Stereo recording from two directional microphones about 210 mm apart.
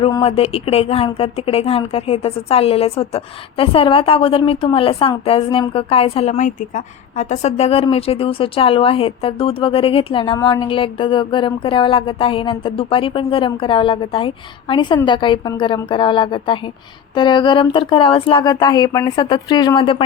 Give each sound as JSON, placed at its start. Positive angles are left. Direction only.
{"t": 0.0, "sound": "speech", "side_deg": 25}